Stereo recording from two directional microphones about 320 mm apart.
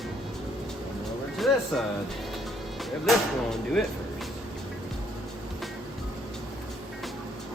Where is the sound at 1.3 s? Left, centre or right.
Centre.